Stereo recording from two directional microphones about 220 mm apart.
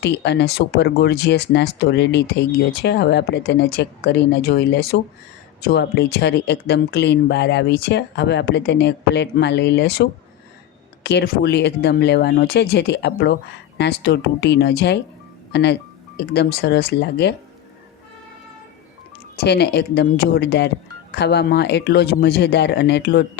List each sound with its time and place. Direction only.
0.0 s speech: 50° left (ahead or behind)
19.5 s speech: 50° left (ahead or behind)